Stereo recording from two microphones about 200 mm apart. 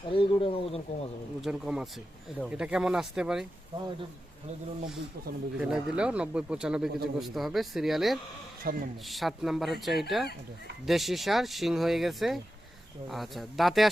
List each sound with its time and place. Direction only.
0.1 s speech: 25° left (ahead or behind)
1.4 s speech: 5° right (ahead or behind)
5.5 s speech: 5° right (ahead or behind)
8.7 s a man's voice: 45° right (ahead or behind)
9.0 s speech: centre (ahead or behind)